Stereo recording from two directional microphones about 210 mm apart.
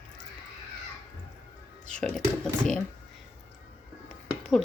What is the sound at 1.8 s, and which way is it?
Speech, 5° left (ahead or behind).